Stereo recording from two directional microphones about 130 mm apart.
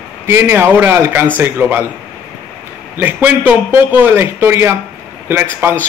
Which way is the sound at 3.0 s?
15° right (ahead or behind).